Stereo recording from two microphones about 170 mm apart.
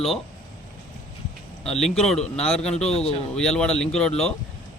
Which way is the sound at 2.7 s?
40° left (ahead or behind).